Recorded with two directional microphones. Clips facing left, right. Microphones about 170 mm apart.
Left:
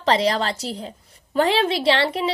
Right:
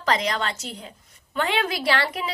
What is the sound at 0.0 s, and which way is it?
Speech, 30° left (ahead or behind).